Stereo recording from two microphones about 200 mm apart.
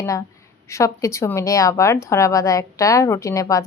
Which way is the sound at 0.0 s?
15° left (ahead or behind).